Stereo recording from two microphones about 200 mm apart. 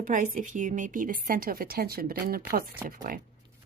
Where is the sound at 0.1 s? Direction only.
40° right (ahead or behind).